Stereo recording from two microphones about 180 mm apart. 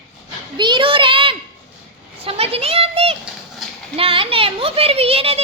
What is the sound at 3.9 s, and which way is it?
Speech, 30° right (ahead or behind).